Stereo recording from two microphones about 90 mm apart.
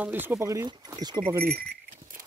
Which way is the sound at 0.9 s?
50° right (ahead or behind).